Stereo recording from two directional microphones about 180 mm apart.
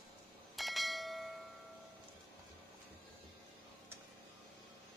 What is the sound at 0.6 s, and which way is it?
Bell, centre (ahead or behind).